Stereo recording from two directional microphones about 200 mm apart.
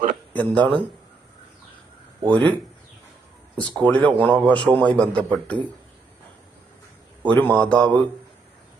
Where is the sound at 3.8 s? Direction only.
5° left (ahead or behind).